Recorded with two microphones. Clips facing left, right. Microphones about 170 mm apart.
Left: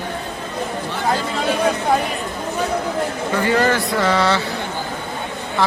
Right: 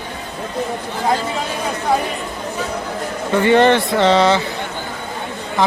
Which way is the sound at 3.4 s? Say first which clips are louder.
Right 6 dB; 25° right (ahead or behind).